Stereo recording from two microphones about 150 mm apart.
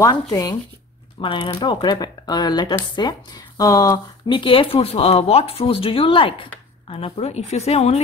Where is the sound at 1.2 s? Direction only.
35° left (ahead or behind).